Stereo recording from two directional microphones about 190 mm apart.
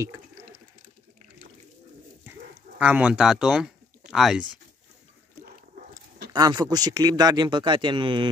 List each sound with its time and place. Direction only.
2.8 s speech: 5° right (ahead or behind)
6.3 s speech: 20° right (ahead or behind)